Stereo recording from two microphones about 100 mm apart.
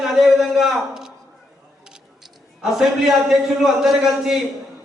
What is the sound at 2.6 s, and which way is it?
A man's voice, centre (ahead or behind).